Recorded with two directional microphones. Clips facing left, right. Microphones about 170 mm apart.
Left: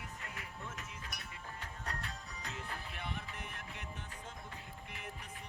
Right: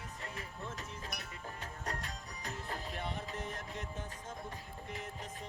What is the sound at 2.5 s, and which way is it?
Music, 40° right (ahead or behind).